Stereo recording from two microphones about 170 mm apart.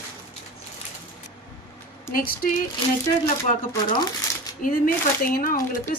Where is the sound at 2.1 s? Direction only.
55° left (ahead or behind).